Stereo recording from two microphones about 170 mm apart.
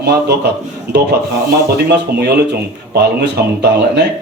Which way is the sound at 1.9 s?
75° right (ahead or behind).